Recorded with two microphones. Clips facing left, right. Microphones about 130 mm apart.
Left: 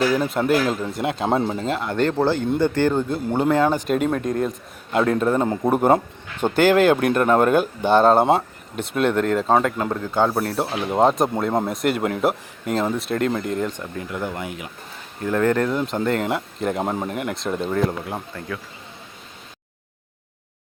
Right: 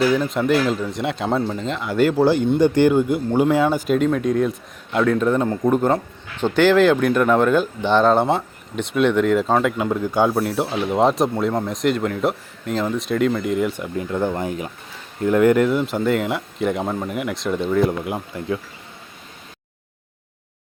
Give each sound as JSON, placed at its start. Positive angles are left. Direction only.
{"t": 0.2, "sound": "speech", "side_deg": 5}
{"t": 6.4, "sound": "speech", "side_deg": 50}
{"t": 8.8, "sound": "speech", "side_deg": 0}
{"t": 10.3, "sound": "speech", "side_deg": 0}
{"t": 13.9, "sound": "speech", "side_deg": -25}
{"t": 15.2, "sound": "speech", "side_deg": -15}
{"t": 16.8, "sound": "speech", "side_deg": 15}
{"t": 17.1, "sound": "speech", "side_deg": 0}
{"t": 17.8, "sound": "speech", "side_deg": -15}